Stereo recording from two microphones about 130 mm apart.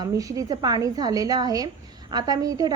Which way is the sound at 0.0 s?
30° right (ahead or behind).